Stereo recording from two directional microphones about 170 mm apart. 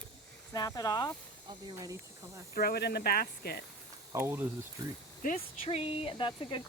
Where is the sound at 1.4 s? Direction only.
20° right (ahead or behind).